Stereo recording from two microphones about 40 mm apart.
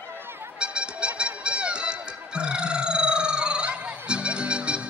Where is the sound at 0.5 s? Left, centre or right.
Right.